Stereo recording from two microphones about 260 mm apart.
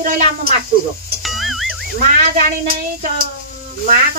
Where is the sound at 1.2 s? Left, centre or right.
Centre.